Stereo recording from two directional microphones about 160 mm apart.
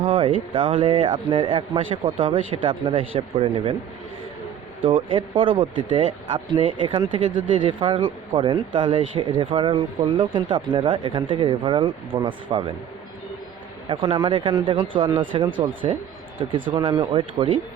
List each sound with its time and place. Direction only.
0.0 s speech: 30° right (ahead or behind)
4.8 s speech: 35° right (ahead or behind)
13.8 s speech: 30° right (ahead or behind)
15.4 s speech: 60° right (ahead or behind)
16.7 s speech: 25° right (ahead or behind)